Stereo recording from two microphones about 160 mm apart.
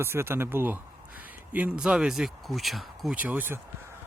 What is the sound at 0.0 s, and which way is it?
A man's voice, 15° right (ahead or behind).